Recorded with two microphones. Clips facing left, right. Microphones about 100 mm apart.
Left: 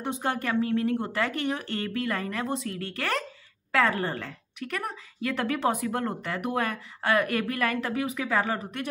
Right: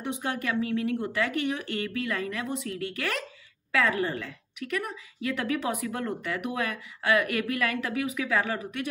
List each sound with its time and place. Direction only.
0.0 s a woman's voice: 40° left (ahead or behind)